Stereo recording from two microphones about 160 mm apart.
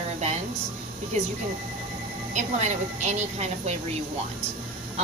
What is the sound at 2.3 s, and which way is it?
A woman's voice, 45° right (ahead or behind).